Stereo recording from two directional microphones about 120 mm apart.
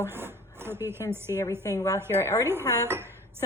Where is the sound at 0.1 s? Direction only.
20° right (ahead or behind).